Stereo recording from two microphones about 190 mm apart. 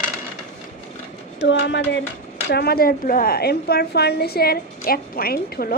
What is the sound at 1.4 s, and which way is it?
Speech, 65° left (ahead or behind).